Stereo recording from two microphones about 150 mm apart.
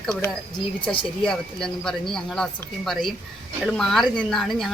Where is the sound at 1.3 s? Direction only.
5° left (ahead or behind).